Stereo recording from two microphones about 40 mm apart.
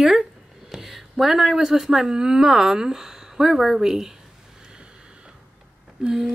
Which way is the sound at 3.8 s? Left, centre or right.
Centre.